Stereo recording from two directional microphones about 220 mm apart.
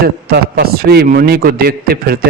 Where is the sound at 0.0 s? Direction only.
45° right (ahead or behind).